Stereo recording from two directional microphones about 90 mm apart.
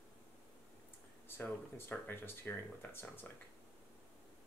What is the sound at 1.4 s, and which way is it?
Speech, 25° left (ahead or behind).